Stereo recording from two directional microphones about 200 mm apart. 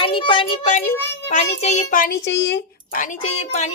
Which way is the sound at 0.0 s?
25° left (ahead or behind).